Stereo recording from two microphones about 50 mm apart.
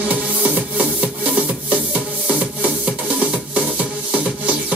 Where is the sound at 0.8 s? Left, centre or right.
Right.